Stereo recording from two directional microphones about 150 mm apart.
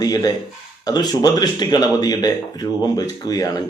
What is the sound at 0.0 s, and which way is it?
Speech, 25° left (ahead or behind).